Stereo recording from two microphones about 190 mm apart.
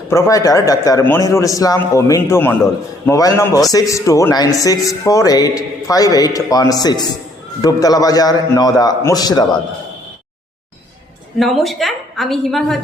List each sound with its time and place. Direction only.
0.1 s a man's voice: 20° left (ahead or behind)
11.3 s a woman's voice: centre (ahead or behind)